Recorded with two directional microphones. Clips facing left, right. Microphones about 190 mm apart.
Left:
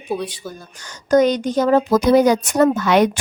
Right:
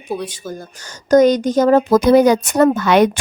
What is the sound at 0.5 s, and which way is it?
A woman's voice, 40° right (ahead or behind).